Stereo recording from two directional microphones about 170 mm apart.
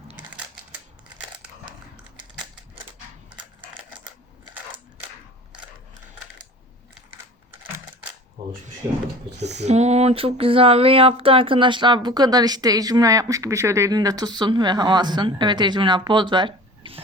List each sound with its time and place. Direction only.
8.8 s speech: 20° right (ahead or behind)
9.4 s speech: 85° right
9.6 s speech: 40° right (ahead or behind)